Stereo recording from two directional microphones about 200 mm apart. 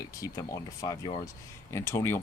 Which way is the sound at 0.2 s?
15° left (ahead or behind).